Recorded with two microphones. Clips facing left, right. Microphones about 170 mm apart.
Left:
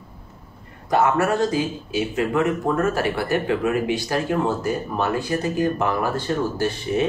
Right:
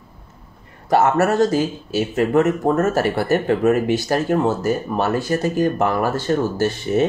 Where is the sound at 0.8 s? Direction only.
45° right (ahead or behind).